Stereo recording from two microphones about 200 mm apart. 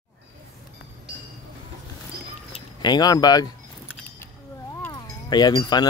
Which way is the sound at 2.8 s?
20° left (ahead or behind).